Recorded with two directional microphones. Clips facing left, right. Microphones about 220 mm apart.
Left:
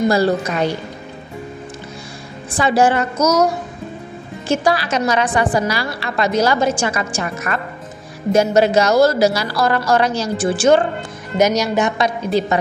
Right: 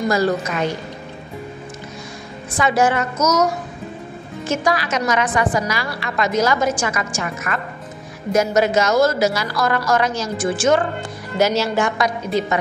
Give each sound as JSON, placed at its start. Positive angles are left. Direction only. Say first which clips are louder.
{"t": 0.0, "sound": "a woman's voice", "louder": "left 3 dB", "side_deg": 30}
{"t": 2.5, "sound": "a woman's voice", "louder": "left 2 dB", "side_deg": 30}
{"t": 4.5, "sound": "a woman's voice", "louder": "left 3 dB", "side_deg": 30}
{"t": 11.3, "sound": "speech", "louder": "left 2 dB", "side_deg": 15}
{"t": 12.3, "sound": "a woman's voice", "louder": "left 3 dB", "side_deg": 35}